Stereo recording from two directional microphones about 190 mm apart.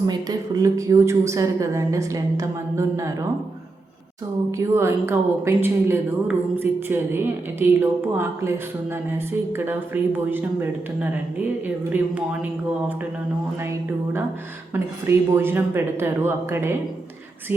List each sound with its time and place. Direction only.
0.1 s a woman's voice: 20° right (ahead or behind)
4.5 s a woman's voice: 15° right (ahead or behind)
13.6 s a woman's voice: 10° right (ahead or behind)